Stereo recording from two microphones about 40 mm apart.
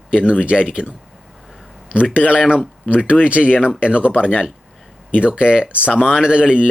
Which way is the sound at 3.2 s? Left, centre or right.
Right.